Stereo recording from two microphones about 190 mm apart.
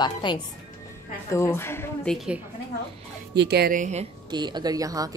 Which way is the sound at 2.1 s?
Centre (ahead or behind).